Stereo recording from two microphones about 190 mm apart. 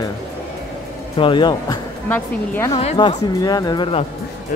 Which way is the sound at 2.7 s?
30° left (ahead or behind).